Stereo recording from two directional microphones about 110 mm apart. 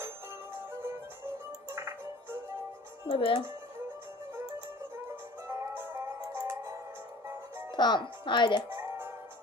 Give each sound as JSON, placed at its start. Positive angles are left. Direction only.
{"t": 0.7, "sound": "music", "side_deg": -20}
{"t": 3.1, "sound": "speech", "side_deg": 55}
{"t": 5.5, "sound": "music", "side_deg": -20}
{"t": 7.8, "sound": "speech", "side_deg": 45}
{"t": 8.7, "sound": "music", "side_deg": -20}